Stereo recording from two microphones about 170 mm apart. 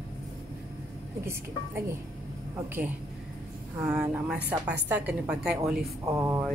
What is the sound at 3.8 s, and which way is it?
Speech, 5° right (ahead or behind).